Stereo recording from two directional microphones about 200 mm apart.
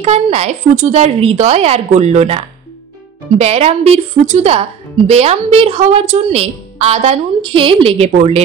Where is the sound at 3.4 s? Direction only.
30° right (ahead or behind).